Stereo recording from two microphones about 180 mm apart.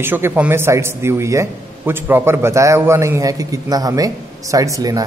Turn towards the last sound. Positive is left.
turn(degrees=-20)  # may be behind; listen again after turning